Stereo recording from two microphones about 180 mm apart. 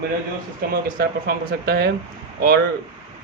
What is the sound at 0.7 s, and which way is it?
A man's voice, 60° right (ahead or behind).